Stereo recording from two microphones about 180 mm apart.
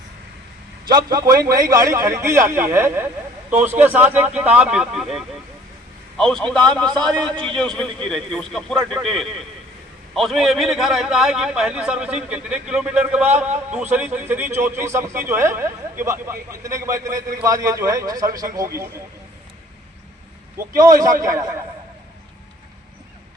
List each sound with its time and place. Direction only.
0.9 s a man's voice: 20° right (ahead or behind)
20.7 s a man's voice: 20° right (ahead or behind)